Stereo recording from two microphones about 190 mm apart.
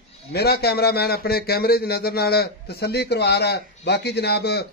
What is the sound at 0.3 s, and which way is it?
A man's voice, 55° left (ahead or behind).